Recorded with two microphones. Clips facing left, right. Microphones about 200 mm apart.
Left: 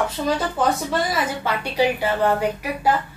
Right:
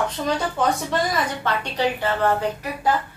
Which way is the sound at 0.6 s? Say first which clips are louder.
Left 1 dB; centre (ahead or behind).